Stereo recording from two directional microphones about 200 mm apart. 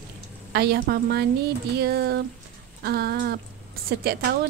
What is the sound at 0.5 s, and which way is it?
A woman's voice, 55° right (ahead or behind).